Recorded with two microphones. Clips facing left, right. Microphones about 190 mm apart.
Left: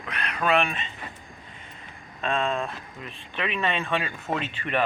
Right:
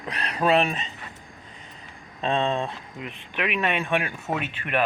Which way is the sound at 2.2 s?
25° right (ahead or behind).